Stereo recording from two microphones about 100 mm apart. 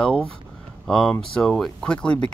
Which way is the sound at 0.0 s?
10° left (ahead or behind).